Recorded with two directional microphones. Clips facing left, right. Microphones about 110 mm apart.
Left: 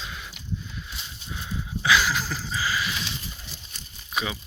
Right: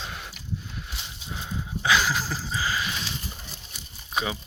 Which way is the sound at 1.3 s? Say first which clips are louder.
Even; 35° right (ahead or behind).